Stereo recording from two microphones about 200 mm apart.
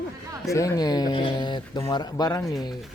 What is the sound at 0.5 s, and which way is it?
Speech, 15° left (ahead or behind).